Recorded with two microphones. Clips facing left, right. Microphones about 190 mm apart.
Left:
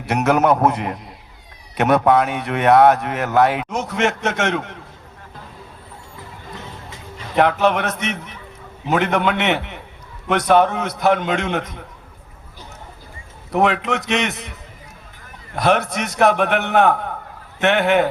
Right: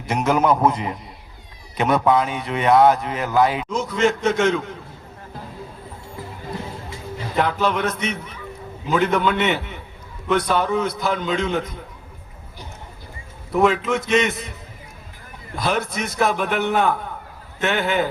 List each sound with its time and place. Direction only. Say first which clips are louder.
0.0 s a man's voice: left 2 dB; 65° left (ahead or behind)
7.3 s a man's voice: left 4 dB; 70° left (ahead or behind)
13.5 s a man's voice: even; 70° left (ahead or behind)
15.5 s a man's voice: left 5 dB; 70° left (ahead or behind)